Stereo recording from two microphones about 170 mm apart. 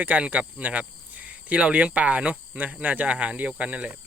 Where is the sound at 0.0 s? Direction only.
10° right (ahead or behind).